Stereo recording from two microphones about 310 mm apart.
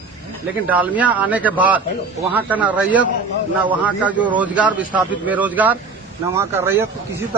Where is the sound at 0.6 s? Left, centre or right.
Centre.